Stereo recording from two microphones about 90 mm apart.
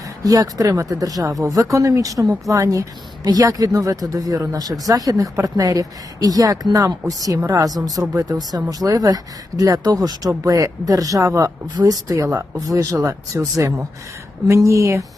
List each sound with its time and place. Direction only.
0.3 s speech: 45° right (ahead or behind)